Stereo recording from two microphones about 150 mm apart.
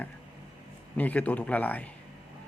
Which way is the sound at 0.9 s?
10° left (ahead or behind).